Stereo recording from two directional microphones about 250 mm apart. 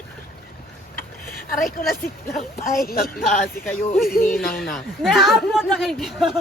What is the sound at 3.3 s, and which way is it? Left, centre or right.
Speech, centre.